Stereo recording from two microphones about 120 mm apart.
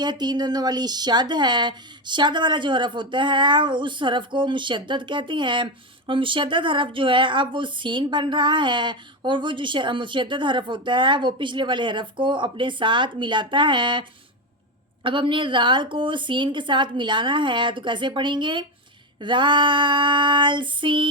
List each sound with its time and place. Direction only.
0.0 s speech: 35° right (ahead or behind)
15.0 s speech: 45° right (ahead or behind)